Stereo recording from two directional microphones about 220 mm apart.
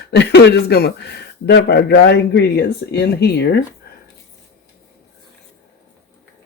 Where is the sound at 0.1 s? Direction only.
50° left (ahead or behind).